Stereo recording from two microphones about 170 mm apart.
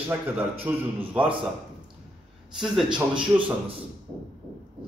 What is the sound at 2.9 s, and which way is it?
Speech, 30° right (ahead or behind).